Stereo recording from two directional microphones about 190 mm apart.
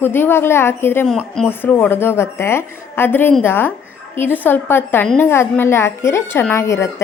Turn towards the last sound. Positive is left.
turn(degrees=15)  # may be behind; listen again after turning